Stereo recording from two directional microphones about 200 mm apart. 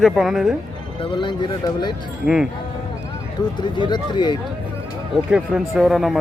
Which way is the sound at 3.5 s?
20° left (ahead or behind).